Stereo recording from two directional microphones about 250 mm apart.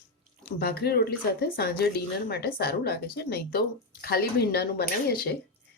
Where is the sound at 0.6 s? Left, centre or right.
Left.